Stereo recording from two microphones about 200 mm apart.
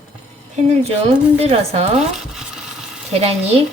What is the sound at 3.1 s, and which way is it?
Speech, 30° right (ahead or behind).